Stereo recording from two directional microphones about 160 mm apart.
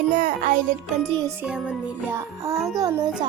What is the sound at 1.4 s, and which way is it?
Music, 5° right (ahead or behind).